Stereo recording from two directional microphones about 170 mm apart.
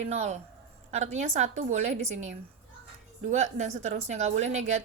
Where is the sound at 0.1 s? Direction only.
40° right (ahead or behind).